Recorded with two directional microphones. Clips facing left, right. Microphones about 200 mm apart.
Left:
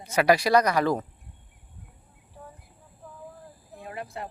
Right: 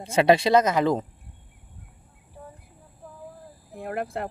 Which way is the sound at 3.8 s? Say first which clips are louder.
Right 7 dB; 60° right (ahead or behind).